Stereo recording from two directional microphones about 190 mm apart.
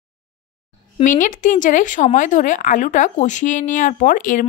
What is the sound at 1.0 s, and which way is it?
Speech, 40° left (ahead or behind).